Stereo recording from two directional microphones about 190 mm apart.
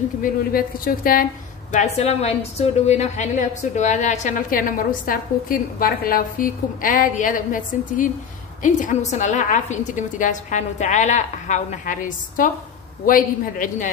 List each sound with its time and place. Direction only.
0.2 s a woman's voice: 50° left (ahead or behind)
1.7 s a woman's voice: 35° left (ahead or behind)